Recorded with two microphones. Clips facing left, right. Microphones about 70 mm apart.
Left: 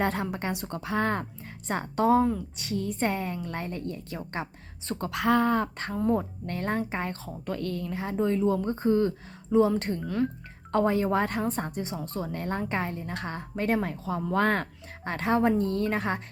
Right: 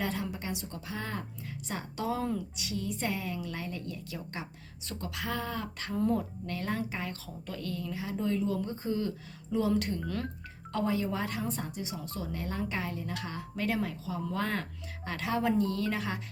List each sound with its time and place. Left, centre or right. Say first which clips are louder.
0.0 s a woman's voice: left 6 dB; left
8.2 s a woman's voice: left 6 dB; left
10.0 s speech: left 7 dB; centre
10.7 s a woman's voice: left 7 dB; left